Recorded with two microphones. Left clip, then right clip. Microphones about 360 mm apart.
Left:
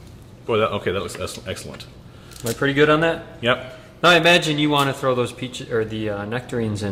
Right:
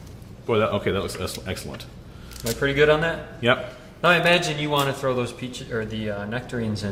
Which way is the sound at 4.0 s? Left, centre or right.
Left.